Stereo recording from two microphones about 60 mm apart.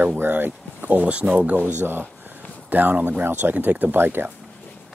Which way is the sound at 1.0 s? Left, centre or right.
Centre.